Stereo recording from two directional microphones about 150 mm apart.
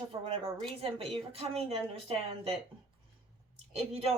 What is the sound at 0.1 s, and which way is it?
Speech, 30° right (ahead or behind).